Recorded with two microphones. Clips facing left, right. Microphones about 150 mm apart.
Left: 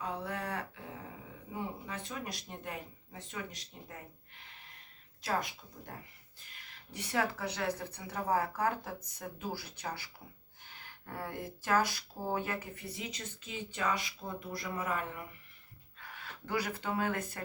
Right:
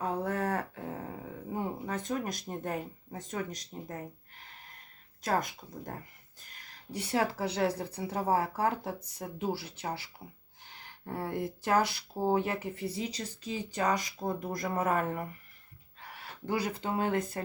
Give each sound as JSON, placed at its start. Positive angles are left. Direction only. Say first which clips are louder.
{"t": 0.0, "sound": "a sound", "louder": "right 7 dB", "side_deg": -45}
{"t": 5.2, "sound": "speech", "louder": "right 4 dB", "side_deg": -45}
{"t": 16.0, "sound": "speech", "louder": "right 3 dB", "side_deg": -30}